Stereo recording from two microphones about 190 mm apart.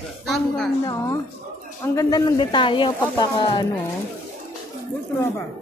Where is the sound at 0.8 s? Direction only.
15° left (ahead or behind).